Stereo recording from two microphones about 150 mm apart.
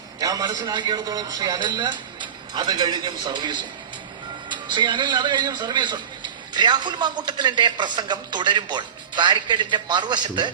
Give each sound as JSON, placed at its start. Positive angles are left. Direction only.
{"t": 0.2, "sound": "a man's voice", "side_deg": -25}